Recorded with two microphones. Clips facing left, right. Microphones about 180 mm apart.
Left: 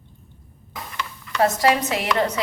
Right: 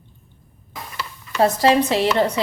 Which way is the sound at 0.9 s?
30° right (ahead or behind).